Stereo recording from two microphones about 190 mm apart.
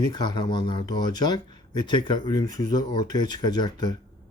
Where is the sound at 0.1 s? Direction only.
25° left (ahead or behind).